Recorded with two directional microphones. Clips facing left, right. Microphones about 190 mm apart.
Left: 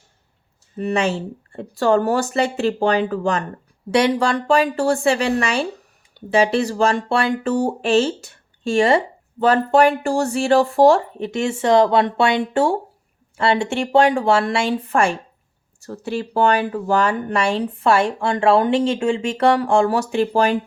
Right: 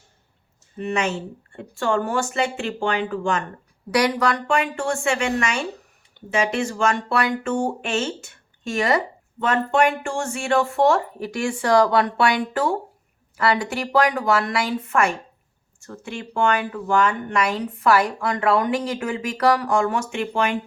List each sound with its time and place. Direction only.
0.8 s speech: 35° left (ahead or behind)
3.9 s speech: 25° left (ahead or behind)